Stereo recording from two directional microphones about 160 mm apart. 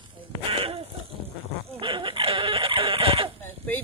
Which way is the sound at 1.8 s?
35° right (ahead or behind).